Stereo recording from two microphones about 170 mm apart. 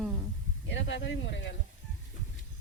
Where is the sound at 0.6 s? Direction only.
90° left.